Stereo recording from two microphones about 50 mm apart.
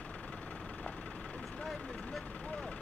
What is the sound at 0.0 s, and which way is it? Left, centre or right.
Vehicle, left.